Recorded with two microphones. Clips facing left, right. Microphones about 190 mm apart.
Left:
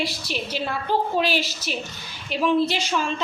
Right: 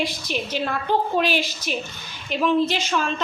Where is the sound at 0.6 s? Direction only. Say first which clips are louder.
Right 1 dB; 5° left (ahead or behind).